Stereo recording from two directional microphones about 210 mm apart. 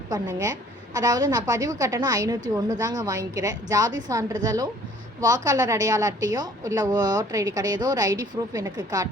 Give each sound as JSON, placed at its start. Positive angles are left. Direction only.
{"t": 0.1, "sound": "a woman's voice", "side_deg": -15}